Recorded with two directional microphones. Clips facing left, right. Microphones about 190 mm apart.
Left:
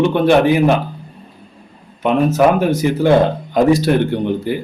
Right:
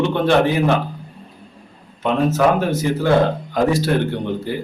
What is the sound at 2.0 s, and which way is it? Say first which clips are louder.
Speech: left 3 dB; 15° left (ahead or behind).